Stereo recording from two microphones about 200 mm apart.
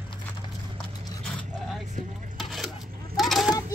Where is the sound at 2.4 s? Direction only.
Centre (ahead or behind).